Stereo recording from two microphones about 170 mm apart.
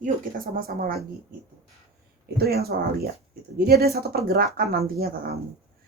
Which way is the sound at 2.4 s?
65° right (ahead or behind).